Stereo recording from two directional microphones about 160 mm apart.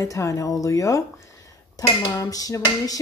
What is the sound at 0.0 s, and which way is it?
Speech, 20° left (ahead or behind).